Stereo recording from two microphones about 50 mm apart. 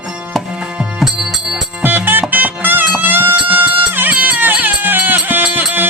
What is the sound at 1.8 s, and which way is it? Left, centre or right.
Music, right.